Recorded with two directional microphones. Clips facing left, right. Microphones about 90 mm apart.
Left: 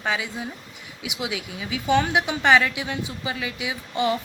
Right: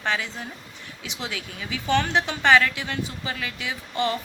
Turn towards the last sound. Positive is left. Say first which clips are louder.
# left 2 dB
turn(degrees=15)  # may be behind; listen again after turning